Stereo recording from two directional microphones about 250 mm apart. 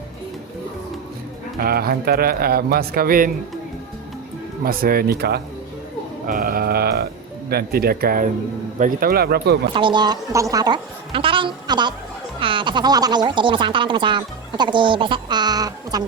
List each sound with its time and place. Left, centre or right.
1.5 s speech: right
4.6 s speech: right
9.7 s a woman's voice: centre